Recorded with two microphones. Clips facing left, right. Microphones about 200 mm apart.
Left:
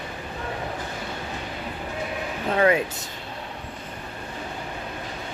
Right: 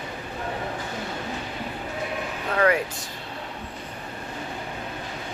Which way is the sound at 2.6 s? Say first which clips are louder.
Left 1 dB; 25° left (ahead or behind).